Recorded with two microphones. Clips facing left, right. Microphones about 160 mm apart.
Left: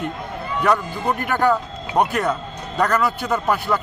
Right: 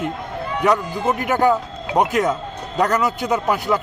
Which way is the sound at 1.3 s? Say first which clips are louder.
Right 1 dB; 15° right (ahead or behind).